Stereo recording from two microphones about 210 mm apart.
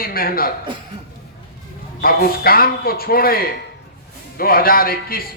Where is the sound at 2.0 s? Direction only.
45° left (ahead or behind).